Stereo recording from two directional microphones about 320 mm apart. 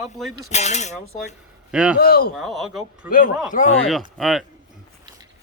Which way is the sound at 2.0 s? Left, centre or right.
Left.